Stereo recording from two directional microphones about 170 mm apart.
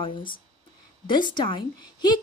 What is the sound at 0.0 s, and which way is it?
Speech, 30° left (ahead or behind).